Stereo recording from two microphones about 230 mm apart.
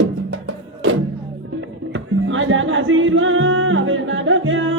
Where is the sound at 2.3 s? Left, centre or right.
Right.